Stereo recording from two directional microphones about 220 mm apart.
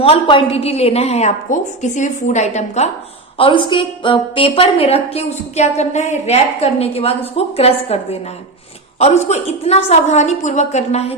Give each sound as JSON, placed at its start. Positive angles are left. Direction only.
{"t": 0.0, "sound": "a woman's voice", "side_deg": 25}